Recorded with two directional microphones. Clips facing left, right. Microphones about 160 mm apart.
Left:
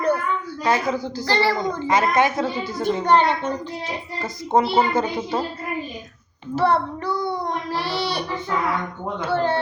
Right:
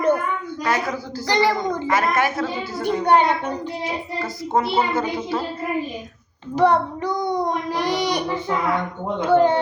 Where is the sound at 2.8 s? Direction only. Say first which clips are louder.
Right 1 dB; 10° right (ahead or behind).